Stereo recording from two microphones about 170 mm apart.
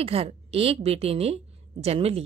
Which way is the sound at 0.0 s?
35° right (ahead or behind).